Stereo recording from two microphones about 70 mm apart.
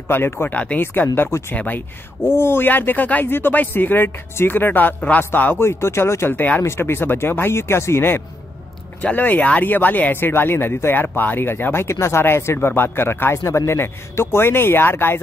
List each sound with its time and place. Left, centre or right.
0.1 s speech: left
2.2 s speech: left
5.7 s speech: left
6.6 s speech: left
9.0 s speech: left